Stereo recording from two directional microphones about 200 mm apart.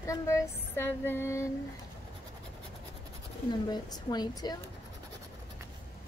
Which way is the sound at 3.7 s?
20° left (ahead or behind).